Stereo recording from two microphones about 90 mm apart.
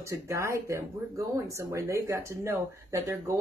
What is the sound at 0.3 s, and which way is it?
Speech, 35° right (ahead or behind).